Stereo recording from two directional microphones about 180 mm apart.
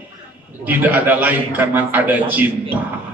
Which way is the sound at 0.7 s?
10° right (ahead or behind).